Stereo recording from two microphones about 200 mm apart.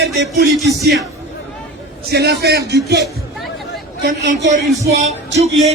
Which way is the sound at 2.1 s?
55° right (ahead or behind).